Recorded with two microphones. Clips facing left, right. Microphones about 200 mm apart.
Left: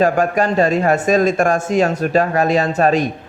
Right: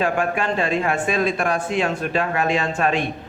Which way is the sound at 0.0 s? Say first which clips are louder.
Left 6 dB; 40° left (ahead or behind).